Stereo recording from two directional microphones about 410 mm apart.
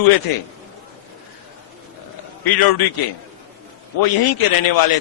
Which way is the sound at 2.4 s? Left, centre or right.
Left.